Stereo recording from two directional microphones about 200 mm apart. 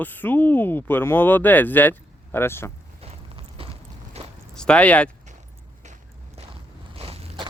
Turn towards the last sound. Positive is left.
turn(degrees=-30)  # may be behind; listen again after turning